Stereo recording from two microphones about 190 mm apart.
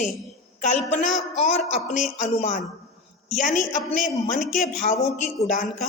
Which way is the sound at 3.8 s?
Centre (ahead or behind).